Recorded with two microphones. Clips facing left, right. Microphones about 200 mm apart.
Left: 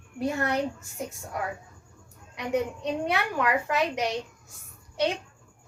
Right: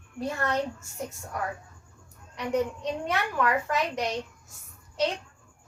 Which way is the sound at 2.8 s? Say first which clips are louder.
Left 2 dB; 15° left (ahead or behind).